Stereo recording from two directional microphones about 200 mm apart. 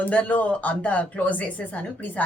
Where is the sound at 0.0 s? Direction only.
5° left (ahead or behind).